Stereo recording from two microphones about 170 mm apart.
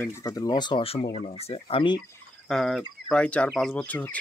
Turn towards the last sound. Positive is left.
turn(degrees=10)  # may be behind; listen again after turning